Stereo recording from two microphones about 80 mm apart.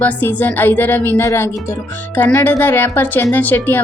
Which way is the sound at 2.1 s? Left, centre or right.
Left.